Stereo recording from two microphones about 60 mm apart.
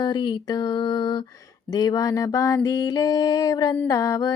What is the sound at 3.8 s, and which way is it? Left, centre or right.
Mantra, left.